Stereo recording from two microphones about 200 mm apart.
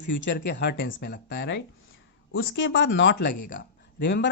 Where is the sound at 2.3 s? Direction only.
75° left (ahead or behind).